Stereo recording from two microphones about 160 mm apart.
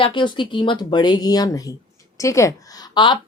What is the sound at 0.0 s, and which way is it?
Speech, 30° left (ahead or behind).